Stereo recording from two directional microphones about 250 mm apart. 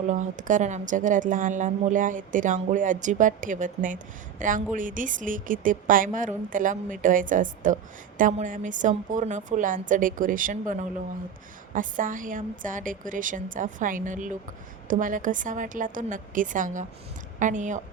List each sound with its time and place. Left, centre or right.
0.1 s a woman's voice: right